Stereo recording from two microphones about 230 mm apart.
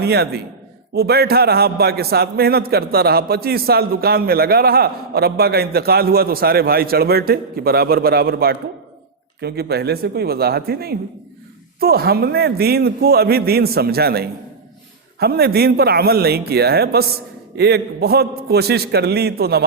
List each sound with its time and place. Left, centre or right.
0.0 s a man's voice: right